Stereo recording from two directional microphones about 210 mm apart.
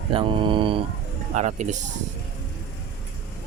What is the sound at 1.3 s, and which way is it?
Speech, 35° right (ahead or behind).